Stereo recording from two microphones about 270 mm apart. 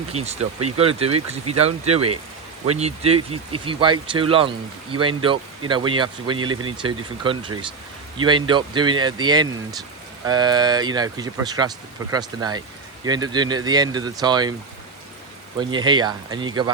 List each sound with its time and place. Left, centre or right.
0.1 s speech: right
15.5 s speech: centre